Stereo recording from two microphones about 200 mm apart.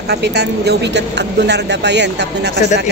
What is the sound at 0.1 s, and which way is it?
Speech, 55° right (ahead or behind).